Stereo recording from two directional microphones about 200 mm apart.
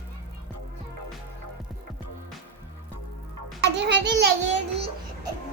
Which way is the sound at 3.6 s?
60° right (ahead or behind).